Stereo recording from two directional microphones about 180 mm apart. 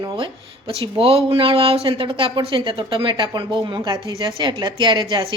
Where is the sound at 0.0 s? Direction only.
20° right (ahead or behind).